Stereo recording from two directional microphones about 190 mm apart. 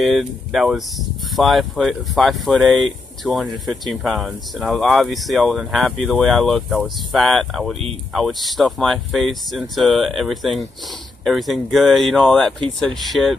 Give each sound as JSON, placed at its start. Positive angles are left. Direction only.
{"t": 0.0, "sound": "speech", "side_deg": 0}